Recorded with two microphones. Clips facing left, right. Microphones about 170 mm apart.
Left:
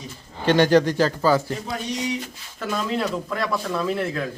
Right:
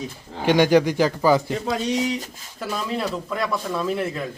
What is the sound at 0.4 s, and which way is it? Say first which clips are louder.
A man's voice: even; 10° right (ahead or behind).